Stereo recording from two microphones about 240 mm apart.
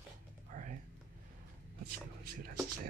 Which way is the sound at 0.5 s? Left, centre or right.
Right.